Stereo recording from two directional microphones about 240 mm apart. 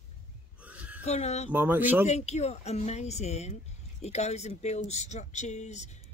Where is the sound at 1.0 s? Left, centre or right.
Left.